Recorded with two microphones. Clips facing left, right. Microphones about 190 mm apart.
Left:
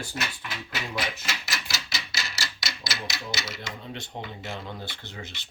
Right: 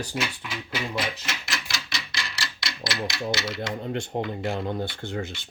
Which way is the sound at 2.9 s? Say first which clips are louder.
Right 8 dB; centre (ahead or behind).